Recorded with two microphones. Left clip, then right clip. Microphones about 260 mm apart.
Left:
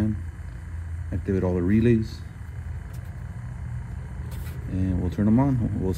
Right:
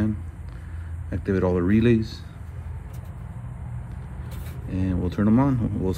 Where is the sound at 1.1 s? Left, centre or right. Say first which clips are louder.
Right 3 dB; centre.